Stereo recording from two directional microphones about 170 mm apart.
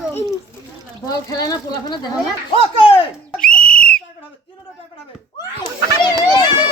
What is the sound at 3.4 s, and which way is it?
Whistle, 5° left (ahead or behind).